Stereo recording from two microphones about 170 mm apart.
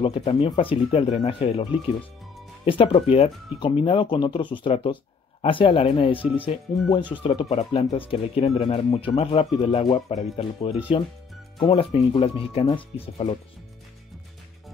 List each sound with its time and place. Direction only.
0.0 s speech: 30° left (ahead or behind)